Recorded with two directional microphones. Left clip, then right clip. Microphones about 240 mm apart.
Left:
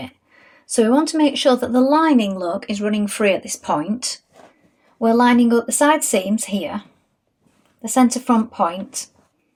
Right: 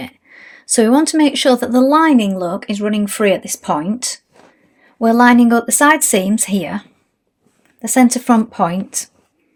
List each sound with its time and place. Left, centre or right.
0.6 s speech: right
7.8 s speech: right